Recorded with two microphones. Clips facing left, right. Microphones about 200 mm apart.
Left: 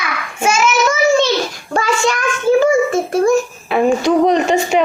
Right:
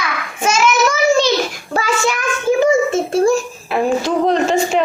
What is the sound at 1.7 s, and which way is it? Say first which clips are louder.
Child singing: left 2 dB; 5° right (ahead or behind).